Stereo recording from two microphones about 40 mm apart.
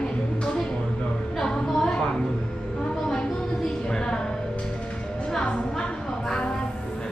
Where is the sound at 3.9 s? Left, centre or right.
Centre.